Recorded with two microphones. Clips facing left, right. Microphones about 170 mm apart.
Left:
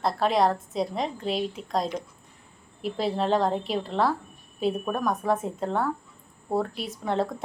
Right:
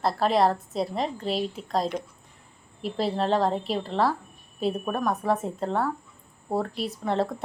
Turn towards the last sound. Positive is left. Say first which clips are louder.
# right 1 dB
turn(degrees=0)  # may be behind; listen again after turning